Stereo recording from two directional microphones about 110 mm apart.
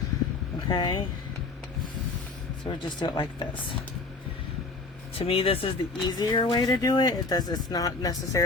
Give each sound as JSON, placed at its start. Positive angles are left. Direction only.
{"t": 0.7, "sound": "speech", "side_deg": 45}
{"t": 2.6, "sound": "speech", "side_deg": 50}
{"t": 5.1, "sound": "speech", "side_deg": 60}
{"t": 6.1, "sound": "speech", "side_deg": 40}